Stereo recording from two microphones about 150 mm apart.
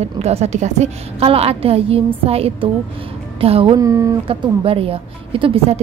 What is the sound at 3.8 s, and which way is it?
Speech, 20° right (ahead or behind).